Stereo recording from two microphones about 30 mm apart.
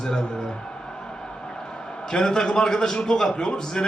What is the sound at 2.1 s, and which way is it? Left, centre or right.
A man's voice, left.